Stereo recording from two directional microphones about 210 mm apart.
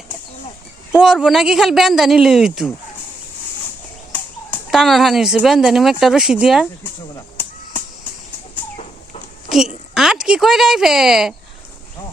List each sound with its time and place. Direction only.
0.9 s a woman's voice: 5° right (ahead or behind)
4.1 s speech: 5° left (ahead or behind)
7.4 s a sound: 10° left (ahead or behind)
9.5 s a woman's voice: centre (ahead or behind)